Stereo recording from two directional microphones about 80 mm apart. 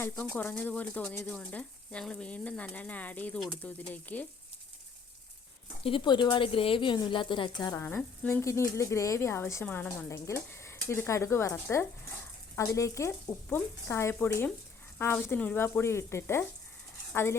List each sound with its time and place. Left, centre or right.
0.3 s speech: left
5.9 s a woman's voice: left
7.8 s speech: left
9.6 s speech: centre
10.1 s speech: left